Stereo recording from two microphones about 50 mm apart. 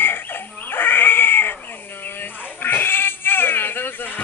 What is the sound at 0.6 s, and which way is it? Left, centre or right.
Cat, left.